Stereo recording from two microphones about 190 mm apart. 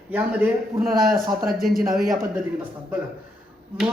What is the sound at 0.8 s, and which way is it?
Speech, 50° right (ahead or behind).